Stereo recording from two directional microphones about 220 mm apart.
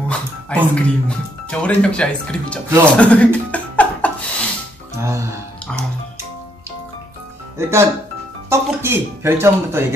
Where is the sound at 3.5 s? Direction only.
5° left (ahead or behind).